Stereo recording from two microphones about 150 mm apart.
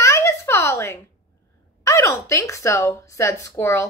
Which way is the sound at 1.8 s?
20° left (ahead or behind).